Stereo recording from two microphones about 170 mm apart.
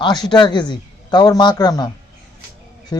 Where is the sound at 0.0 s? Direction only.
25° left (ahead or behind).